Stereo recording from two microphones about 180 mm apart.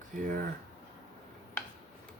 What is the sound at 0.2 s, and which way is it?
Speech, 50° right (ahead or behind).